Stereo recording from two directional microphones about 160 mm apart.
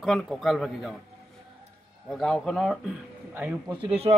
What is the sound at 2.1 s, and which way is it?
Speech, centre (ahead or behind).